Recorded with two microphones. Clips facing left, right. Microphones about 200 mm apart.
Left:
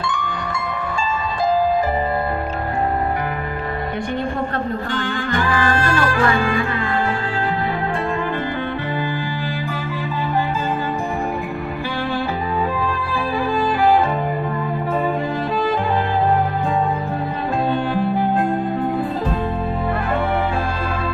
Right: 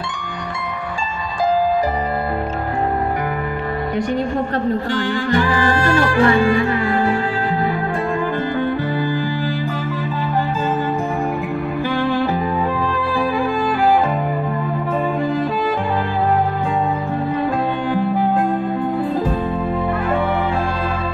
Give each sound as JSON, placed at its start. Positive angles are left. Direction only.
{"t": 5.5, "sound": "music", "side_deg": -15}
{"t": 6.1, "sound": "music", "side_deg": -30}